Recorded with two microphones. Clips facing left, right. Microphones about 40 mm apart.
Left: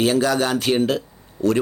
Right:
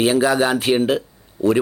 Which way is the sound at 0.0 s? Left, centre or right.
Centre.